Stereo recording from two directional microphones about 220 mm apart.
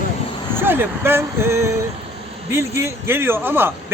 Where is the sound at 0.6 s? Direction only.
10° right (ahead or behind).